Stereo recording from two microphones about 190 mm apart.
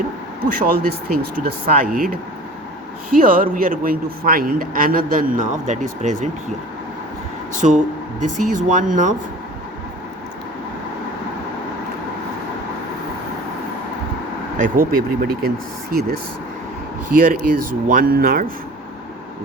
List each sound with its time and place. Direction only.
0.5 s a man's voice: 50° right (ahead or behind)
7.5 s speech: 40° right (ahead or behind)
14.6 s a man's voice: 50° right (ahead or behind)
17.2 s a man's voice: 45° right (ahead or behind)